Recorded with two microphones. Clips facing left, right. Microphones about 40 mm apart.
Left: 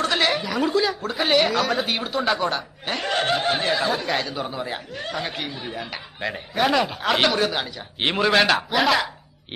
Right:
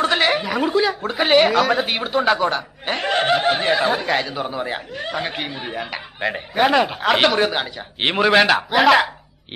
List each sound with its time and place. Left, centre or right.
0.0 s speech: right
3.2 s snicker: centre
3.6 s speech: right
7.0 s speech: centre
7.3 s speech: centre